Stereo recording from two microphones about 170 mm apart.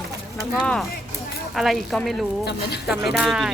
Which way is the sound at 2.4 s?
75° left (ahead or behind).